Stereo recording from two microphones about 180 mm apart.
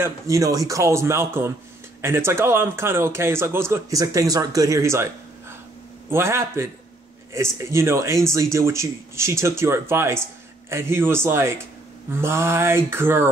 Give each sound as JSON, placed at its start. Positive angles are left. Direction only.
{"t": 0.0, "sound": "a man's voice", "side_deg": -20}
{"t": 6.0, "sound": "a man's voice", "side_deg": -15}